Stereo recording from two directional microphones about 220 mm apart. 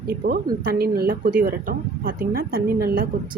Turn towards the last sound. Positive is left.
turn(degrees=-45)  # may be behind; listen again after turning